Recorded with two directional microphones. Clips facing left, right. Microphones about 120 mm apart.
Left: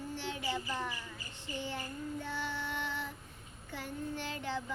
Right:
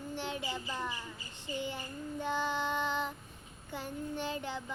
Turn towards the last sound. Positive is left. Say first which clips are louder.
# right 1 dB
turn(degrees=-20)  # may be behind; listen again after turning